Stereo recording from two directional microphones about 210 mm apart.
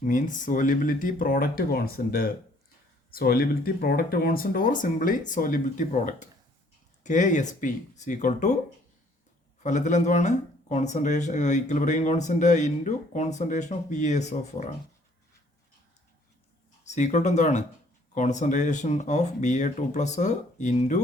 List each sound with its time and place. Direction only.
0.0 s speech: 40° left (ahead or behind)
9.6 s speech: 35° left (ahead or behind)
16.8 s speech: 35° left (ahead or behind)